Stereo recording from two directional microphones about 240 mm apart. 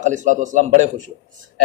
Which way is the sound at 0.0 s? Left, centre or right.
Right.